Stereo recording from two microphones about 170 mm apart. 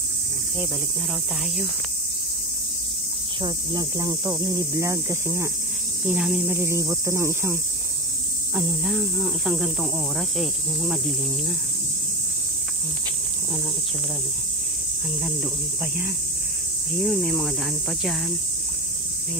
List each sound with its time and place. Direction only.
3.4 s speech: 25° right (ahead or behind)
6.0 s cricket: 5° right (ahead or behind)
6.5 s speech: 15° right (ahead or behind)
8.5 s cricket: 5° right (ahead or behind)
17.0 s cricket: centre (ahead or behind)